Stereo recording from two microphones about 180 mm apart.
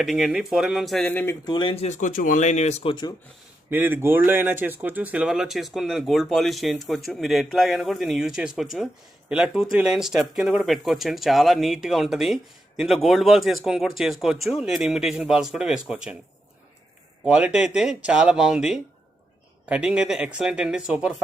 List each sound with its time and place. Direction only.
0.0 s speech: centre (ahead or behind)
1.5 s speech: 25° left (ahead or behind)
3.7 s speech: 10° right (ahead or behind)
17.2 s speech: 5° right (ahead or behind)